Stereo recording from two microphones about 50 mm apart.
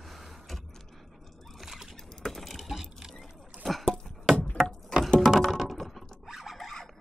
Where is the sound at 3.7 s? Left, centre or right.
Centre.